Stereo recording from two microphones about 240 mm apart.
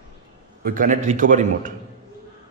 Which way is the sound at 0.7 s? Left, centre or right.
Right.